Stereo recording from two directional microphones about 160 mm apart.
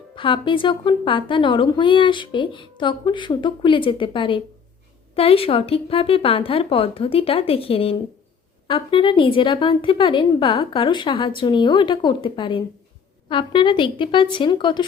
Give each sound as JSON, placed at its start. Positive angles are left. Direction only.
{"t": 0.2, "sound": "a woman's voice", "side_deg": 30}